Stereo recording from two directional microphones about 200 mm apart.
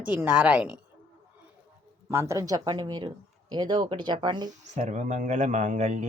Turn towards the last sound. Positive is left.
turn(degrees=-35)  # may be behind; listen again after turning